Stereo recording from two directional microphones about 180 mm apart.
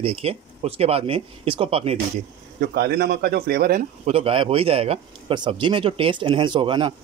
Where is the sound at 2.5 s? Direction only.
55° right (ahead or behind).